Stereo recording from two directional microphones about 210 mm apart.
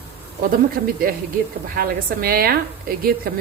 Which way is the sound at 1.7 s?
45° right (ahead or behind).